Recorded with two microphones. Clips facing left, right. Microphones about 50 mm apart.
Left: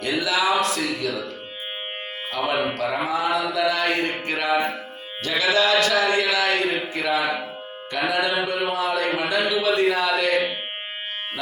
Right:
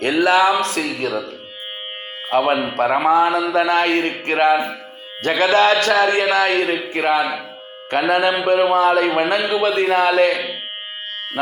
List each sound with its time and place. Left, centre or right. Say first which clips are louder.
0.0 s a man's voice: right 8 dB; right
2.3 s a man's voice: right 7 dB; right
9.8 s a man's voice: right 5 dB; right